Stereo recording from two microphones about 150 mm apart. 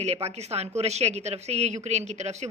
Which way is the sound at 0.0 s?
45° right (ahead or behind).